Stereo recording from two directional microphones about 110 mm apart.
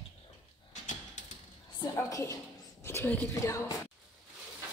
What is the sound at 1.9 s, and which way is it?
A woman's voice, 25° left (ahead or behind).